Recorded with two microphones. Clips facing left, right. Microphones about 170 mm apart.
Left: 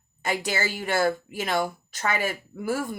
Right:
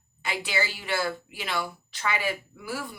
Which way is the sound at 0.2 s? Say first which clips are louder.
Left 3 dB; 45° left (ahead or behind).